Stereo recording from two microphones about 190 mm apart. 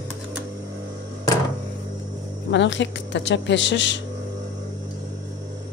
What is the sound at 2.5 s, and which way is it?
Speech, 70° left (ahead or behind).